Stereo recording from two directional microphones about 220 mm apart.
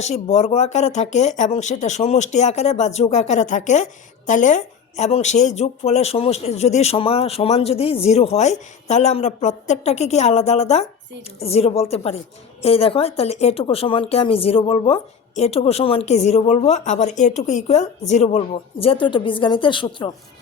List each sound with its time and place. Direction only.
0.0 s speech: 30° left (ahead or behind)